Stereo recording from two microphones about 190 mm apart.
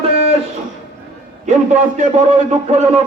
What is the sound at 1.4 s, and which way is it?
A man's voice, 40° right (ahead or behind).